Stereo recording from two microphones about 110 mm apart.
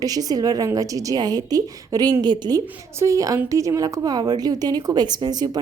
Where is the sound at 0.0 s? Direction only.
35° right (ahead or behind).